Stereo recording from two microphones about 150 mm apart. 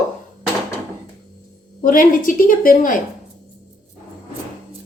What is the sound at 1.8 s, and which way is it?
A woman's voice, 65° left (ahead or behind).